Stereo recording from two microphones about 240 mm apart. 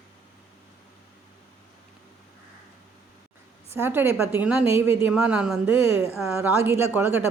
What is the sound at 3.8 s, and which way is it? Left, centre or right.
A woman's voice, centre.